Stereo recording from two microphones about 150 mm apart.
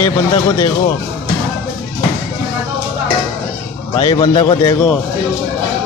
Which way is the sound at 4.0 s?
30° left (ahead or behind).